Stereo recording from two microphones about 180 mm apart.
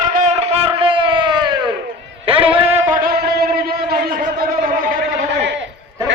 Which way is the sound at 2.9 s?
55° right (ahead or behind).